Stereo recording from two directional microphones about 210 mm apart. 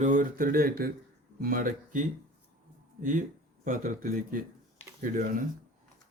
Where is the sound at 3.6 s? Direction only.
40° right (ahead or behind).